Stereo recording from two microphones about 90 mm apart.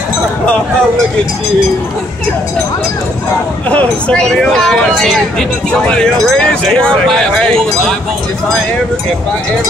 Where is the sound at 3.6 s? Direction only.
15° left (ahead or behind).